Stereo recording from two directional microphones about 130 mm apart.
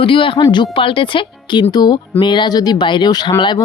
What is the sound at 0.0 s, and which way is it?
Speech, 45° left (ahead or behind).